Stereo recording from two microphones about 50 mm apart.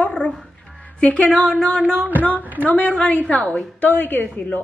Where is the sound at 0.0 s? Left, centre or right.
Left.